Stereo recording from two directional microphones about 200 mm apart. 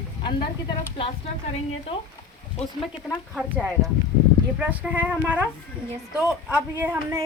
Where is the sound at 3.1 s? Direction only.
5° right (ahead or behind).